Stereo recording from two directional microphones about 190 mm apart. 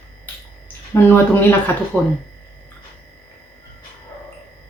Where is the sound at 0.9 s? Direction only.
10° left (ahead or behind).